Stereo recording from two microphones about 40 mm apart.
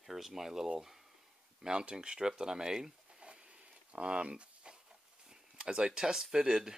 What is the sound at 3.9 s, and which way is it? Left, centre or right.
Speech, right.